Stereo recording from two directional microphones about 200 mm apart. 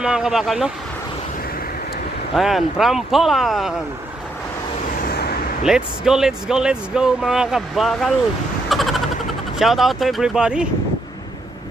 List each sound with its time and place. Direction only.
0.0 s speech: 5° right (ahead or behind)
2.3 s speech: centre (ahead or behind)
4.9 s vehicle: 50° left (ahead or behind)
5.7 s speech: 5° right (ahead or behind)
8.6 s a sound: centre (ahead or behind)
9.6 s speech: centre (ahead or behind)